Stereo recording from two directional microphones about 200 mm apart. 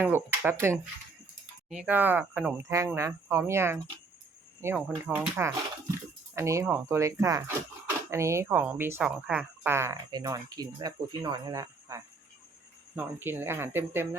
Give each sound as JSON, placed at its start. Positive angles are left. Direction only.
{"t": 0.0, "sound": "speech", "side_deg": -10}